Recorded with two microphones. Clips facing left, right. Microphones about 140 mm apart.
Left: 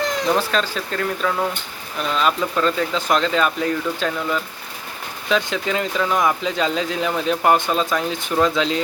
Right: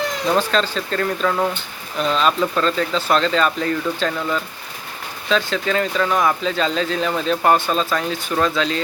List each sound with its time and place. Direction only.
0.3 s speech: 10° left (ahead or behind)